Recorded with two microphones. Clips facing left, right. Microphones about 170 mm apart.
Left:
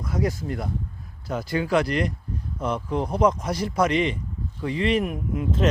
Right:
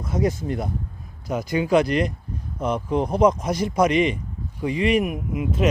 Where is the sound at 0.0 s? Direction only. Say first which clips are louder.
Right 3 dB; 20° right (ahead or behind).